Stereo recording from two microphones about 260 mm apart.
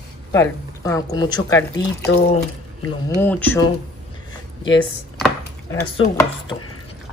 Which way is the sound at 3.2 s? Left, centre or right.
Centre.